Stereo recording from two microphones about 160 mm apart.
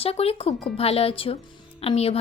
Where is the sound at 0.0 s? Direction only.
40° left (ahead or behind).